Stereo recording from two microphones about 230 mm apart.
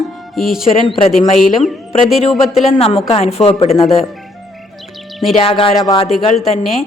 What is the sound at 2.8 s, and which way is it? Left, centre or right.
Speech, left.